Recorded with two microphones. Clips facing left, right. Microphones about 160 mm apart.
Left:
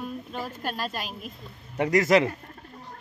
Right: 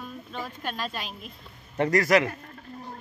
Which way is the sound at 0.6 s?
40° left (ahead or behind).